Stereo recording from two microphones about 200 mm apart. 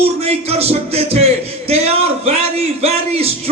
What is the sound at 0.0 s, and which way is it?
Music, 30° right (ahead or behind).